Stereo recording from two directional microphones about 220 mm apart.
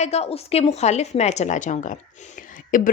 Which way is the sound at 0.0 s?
30° left (ahead or behind).